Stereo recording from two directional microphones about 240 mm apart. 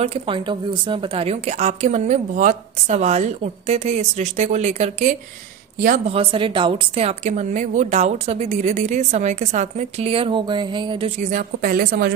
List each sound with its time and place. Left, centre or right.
0.0 s a woman's voice: right
6.1 s a woman's voice: right